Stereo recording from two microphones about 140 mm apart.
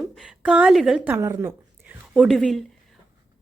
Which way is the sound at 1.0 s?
15° right (ahead or behind).